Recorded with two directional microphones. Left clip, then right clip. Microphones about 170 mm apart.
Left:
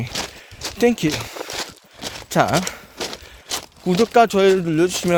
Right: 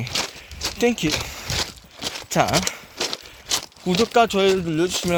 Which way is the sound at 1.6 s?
Centre (ahead or behind).